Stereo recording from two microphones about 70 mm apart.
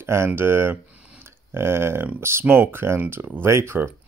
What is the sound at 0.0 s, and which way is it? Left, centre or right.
Speech, right.